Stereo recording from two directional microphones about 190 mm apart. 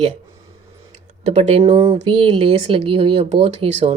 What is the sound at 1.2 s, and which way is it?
Speech, 35° right (ahead or behind).